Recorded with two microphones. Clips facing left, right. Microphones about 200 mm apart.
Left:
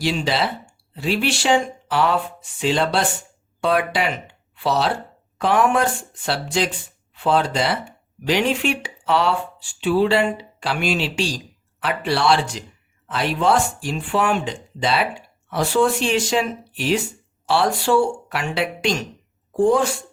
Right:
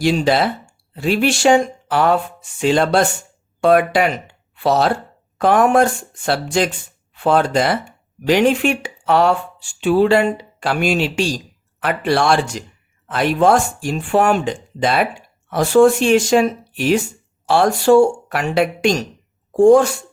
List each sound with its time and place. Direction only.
0.0 s speech: 50° right (ahead or behind)